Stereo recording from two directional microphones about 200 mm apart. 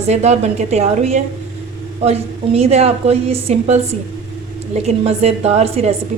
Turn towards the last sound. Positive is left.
turn(degrees=-30)  # may be behind; listen again after turning